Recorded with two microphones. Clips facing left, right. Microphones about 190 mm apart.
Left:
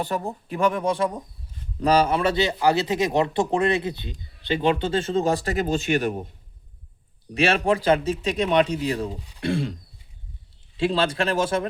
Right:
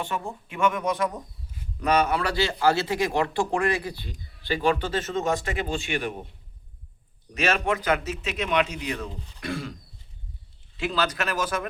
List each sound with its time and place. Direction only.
0.0 s speech: 35° left (ahead or behind)
7.3 s speech: 30° left (ahead or behind)
10.8 s speech: 30° left (ahead or behind)